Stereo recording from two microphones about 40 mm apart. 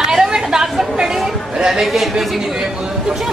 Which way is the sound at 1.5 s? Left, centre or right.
Centre.